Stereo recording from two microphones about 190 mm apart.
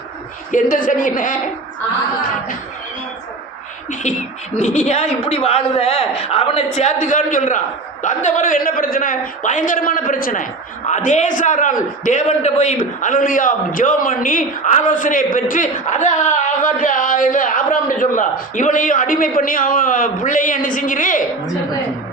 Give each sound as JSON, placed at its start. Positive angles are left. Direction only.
{"t": 0.5, "sound": "a man's voice", "side_deg": 45}
{"t": 3.8, "sound": "a man's voice", "side_deg": 40}